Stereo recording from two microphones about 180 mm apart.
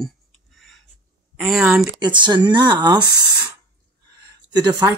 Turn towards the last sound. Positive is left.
turn(degrees=-20)  # may be behind; listen again after turning